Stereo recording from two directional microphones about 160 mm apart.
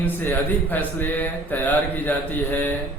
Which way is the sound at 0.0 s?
10° left (ahead or behind).